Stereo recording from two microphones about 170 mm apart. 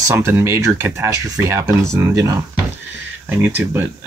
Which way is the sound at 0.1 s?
15° right (ahead or behind).